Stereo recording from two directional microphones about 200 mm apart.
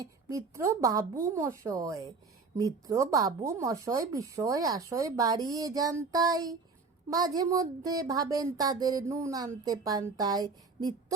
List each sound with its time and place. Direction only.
0.0 s a woman's voice: 15° right (ahead or behind)